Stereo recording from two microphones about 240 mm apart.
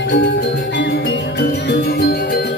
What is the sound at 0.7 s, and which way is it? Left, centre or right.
Music, left.